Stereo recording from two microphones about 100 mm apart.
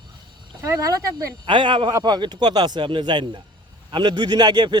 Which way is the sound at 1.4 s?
55° right (ahead or behind).